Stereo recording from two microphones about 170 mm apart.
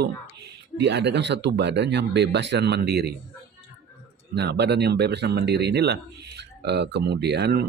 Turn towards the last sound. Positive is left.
turn(degrees=-75)  # may be behind; listen again after turning